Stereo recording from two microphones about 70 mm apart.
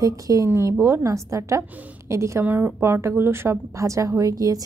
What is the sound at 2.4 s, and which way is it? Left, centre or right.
A woman's voice, right.